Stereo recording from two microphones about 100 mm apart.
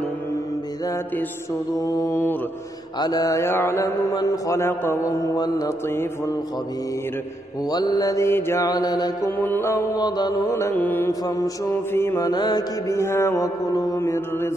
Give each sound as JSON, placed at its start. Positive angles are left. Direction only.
{"t": 1.8, "sound": "mantra", "side_deg": 40}
{"t": 3.4, "sound": "mantra", "side_deg": 25}
{"t": 7.7, "sound": "mantra", "side_deg": 45}
{"t": 8.3, "sound": "mantra", "side_deg": 25}
{"t": 9.4, "sound": "mantra", "side_deg": 20}
{"t": 9.9, "sound": "mantra", "side_deg": 45}
{"t": 10.8, "sound": "mantra", "side_deg": 20}
{"t": 11.1, "sound": "mantra", "side_deg": 35}
{"t": 11.7, "sound": "mantra", "side_deg": 25}
{"t": 12.2, "sound": "mantra", "side_deg": 40}
{"t": 12.9, "sound": "mantra", "side_deg": 25}
{"t": 13.7, "sound": "mantra", "side_deg": 40}